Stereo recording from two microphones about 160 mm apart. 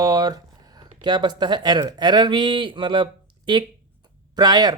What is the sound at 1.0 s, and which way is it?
Speech, 25° right (ahead or behind).